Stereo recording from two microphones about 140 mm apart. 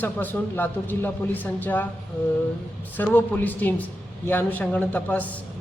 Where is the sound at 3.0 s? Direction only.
10° left (ahead or behind).